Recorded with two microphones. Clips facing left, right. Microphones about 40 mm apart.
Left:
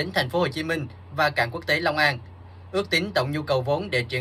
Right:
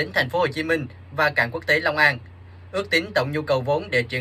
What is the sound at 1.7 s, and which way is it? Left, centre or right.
Speech, centre.